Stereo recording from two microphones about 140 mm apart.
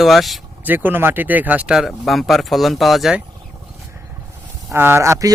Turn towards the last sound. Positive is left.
turn(degrees=-20)  # may be behind; listen again after turning